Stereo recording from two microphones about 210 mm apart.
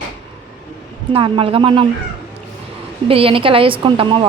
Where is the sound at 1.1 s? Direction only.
25° right (ahead or behind).